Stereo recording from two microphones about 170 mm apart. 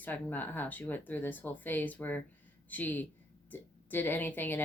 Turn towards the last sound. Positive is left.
turn(degrees=10)  # may be behind; listen again after turning